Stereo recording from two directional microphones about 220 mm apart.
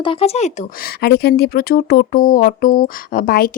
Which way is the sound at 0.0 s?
25° left (ahead or behind).